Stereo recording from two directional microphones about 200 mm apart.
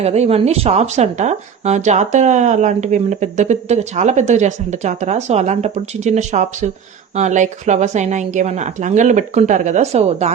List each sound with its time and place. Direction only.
0.0 s speech: 30° right (ahead or behind)